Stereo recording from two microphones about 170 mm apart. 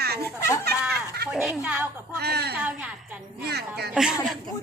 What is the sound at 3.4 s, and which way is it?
Speech, 70° right (ahead or behind).